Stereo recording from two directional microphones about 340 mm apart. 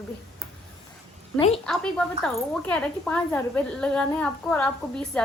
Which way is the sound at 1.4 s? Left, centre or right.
Centre.